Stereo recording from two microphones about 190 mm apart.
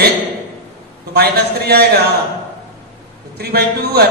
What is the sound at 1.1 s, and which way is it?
Speech, 55° right (ahead or behind).